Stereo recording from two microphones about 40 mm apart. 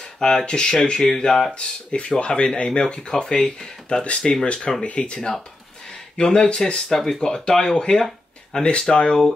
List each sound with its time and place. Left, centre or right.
0.2 s speech: centre
1.5 s speech: left
4.3 s speech: left
6.9 s speech: centre